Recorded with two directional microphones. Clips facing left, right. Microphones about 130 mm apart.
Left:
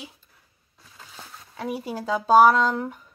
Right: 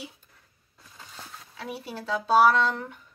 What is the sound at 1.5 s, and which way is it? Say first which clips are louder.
Speech: left 7 dB; 45° left (ahead or behind).